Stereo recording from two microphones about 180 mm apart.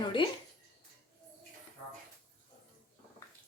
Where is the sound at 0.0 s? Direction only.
25° left (ahead or behind).